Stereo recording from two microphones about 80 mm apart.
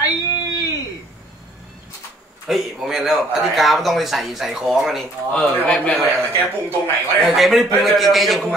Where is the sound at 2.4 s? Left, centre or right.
Centre.